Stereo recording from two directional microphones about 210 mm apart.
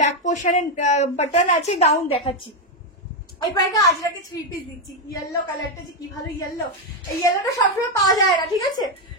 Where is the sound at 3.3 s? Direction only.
20° left (ahead or behind).